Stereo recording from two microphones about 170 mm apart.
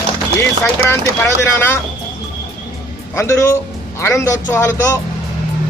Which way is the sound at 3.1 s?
15° left (ahead or behind).